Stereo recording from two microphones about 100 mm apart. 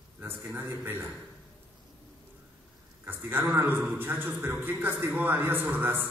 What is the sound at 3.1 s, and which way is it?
A man's voice, 20° right (ahead or behind).